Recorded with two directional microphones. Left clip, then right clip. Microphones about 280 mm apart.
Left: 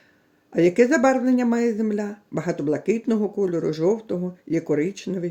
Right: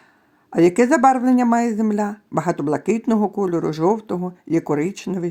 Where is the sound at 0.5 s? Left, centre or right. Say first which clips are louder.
Right 2 dB; right.